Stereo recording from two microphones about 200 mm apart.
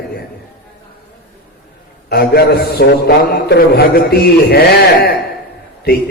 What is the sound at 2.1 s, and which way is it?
A man's voice, 50° left (ahead or behind).